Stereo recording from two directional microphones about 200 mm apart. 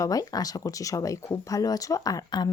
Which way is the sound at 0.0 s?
15° left (ahead or behind).